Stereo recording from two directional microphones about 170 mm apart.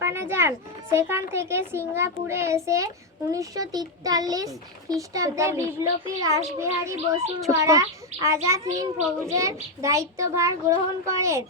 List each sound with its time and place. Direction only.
0.0 s a child's voice: 15° right (ahead or behind)